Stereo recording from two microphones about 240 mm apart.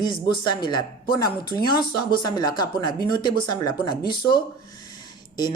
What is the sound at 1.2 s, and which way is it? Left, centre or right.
Speech, centre.